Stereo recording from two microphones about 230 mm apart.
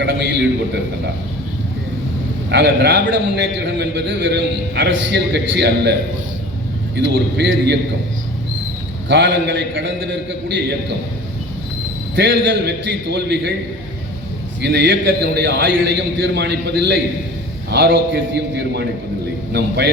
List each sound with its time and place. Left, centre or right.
0.0 s a man's voice: right
2.5 s a man's voice: right
9.0 s a man's voice: right
12.1 s a man's voice: right
14.6 s a man's voice: right